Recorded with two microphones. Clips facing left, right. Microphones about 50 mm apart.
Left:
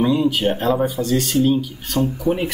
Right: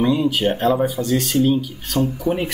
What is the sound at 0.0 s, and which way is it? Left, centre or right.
Speech, centre.